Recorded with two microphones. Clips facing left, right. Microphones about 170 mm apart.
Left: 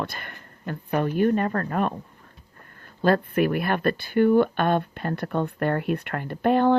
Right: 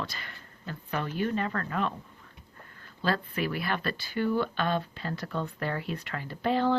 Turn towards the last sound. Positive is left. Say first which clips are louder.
# left 7 dB
turn(degrees=55)  # may be behind; listen again after turning